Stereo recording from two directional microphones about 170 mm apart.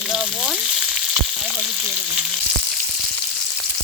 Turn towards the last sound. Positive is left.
turn(degrees=0)  # may be behind; listen again after turning